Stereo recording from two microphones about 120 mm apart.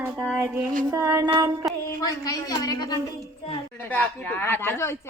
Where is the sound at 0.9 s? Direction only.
25° right (ahead or behind).